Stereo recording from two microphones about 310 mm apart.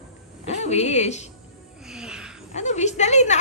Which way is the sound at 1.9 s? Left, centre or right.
Centre.